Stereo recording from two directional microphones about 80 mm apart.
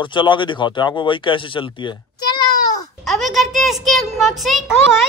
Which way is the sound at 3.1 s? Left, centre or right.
Centre.